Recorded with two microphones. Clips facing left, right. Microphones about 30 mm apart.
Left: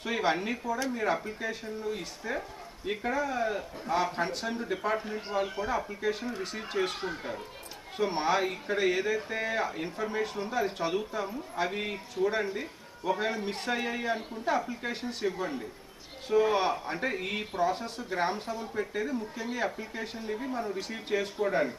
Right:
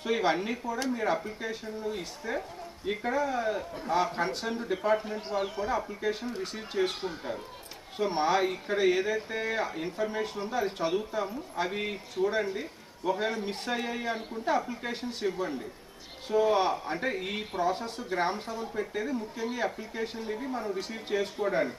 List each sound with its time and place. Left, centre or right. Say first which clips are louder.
0.0 s speech: right 1 dB; centre
16.5 s speech: right 2 dB; centre